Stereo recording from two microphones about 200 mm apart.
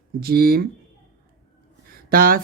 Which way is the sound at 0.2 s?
50° right (ahead or behind).